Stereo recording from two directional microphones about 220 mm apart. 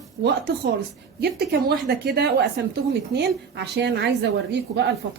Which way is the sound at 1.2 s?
45° right (ahead or behind).